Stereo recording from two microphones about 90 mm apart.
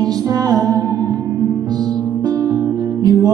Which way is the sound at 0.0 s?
45° right (ahead or behind).